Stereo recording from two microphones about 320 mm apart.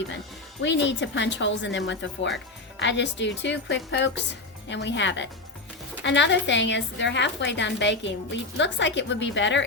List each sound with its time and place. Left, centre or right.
0.6 s a woman's voice: left